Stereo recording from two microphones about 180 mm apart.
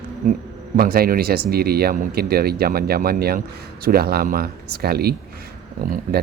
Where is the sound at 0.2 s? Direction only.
50° right (ahead or behind).